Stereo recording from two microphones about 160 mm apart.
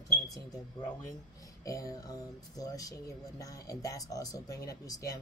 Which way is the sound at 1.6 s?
20° left (ahead or behind).